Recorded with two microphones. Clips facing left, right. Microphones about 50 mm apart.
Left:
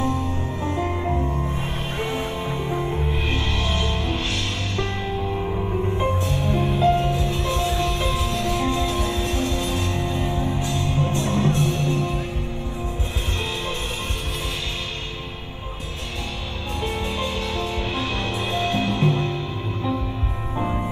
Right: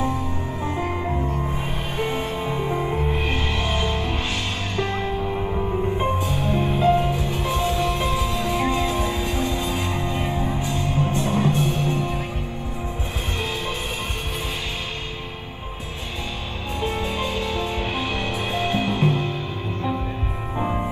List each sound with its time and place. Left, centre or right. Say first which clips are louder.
0.7 s music: left 1 dB; centre
5.3 s music: right 1 dB; centre
16.8 s music: right 1 dB; right
20.5 s music: right 1 dB; centre